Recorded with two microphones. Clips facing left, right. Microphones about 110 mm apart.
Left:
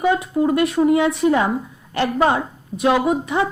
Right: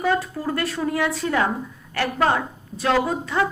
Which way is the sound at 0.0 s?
20° left (ahead or behind).